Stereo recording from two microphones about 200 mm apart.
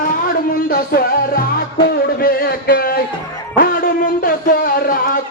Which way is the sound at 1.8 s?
50° left (ahead or behind).